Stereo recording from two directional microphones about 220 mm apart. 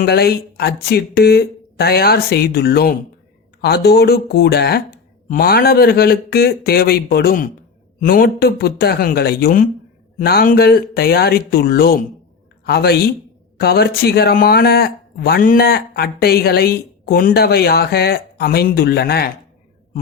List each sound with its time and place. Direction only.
0.0 s speech: 45° left (ahead or behind)